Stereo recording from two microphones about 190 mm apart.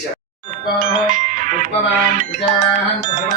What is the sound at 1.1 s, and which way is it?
Music, 45° right (ahead or behind).